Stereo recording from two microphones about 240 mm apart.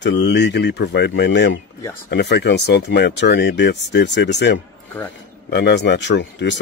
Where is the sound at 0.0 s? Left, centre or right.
Left.